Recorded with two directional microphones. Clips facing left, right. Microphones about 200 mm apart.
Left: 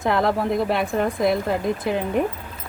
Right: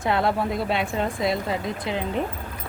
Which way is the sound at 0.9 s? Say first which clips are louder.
Left 4 dB; 55° left (ahead or behind).